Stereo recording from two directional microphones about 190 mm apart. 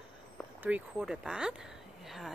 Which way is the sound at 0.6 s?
5° right (ahead or behind).